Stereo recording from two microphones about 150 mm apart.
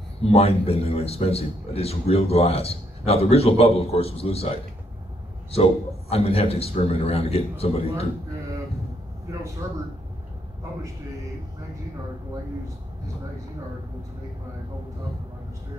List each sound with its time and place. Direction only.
0.3 s a man's voice: 40° left (ahead or behind)
9.3 s a man's voice: 20° right (ahead or behind)